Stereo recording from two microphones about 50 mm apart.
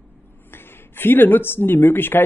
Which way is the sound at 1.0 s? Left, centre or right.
Left.